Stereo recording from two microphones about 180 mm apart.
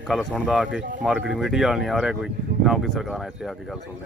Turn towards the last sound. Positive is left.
turn(degrees=0)  # may be behind; listen again after turning